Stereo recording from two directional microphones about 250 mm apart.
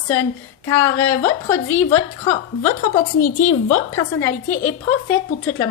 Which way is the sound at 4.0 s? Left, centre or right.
Centre.